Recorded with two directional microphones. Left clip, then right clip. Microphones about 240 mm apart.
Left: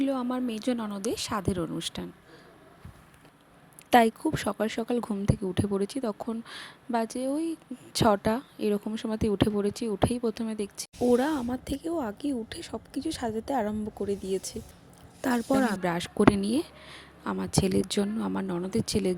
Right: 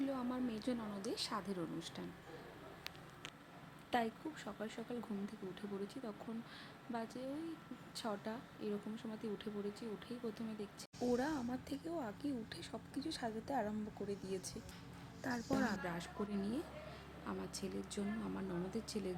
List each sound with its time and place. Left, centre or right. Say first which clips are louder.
0.0 s speech: left 12 dB; left
3.8 s speech: left 18 dB; left